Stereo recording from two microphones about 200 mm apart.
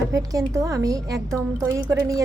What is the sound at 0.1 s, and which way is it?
A woman's voice, 15° right (ahead or behind).